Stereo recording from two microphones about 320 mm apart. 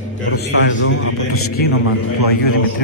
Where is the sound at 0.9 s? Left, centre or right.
Left.